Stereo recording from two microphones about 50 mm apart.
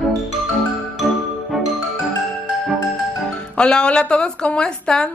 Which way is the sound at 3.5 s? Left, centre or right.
Centre.